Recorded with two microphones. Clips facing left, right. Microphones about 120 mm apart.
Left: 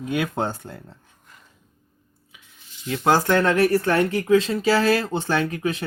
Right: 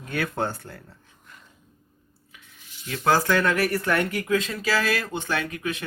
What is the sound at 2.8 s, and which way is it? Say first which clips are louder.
Speech: left 2 dB; 20° left (ahead or behind).